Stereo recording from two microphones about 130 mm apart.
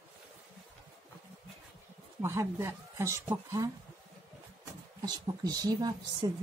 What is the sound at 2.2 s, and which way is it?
Speech, 20° right (ahead or behind).